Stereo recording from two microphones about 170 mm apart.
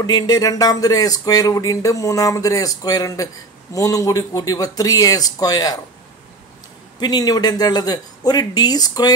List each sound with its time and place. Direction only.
0.0 s speech: 25° left (ahead or behind)
7.0 s speech: 25° left (ahead or behind)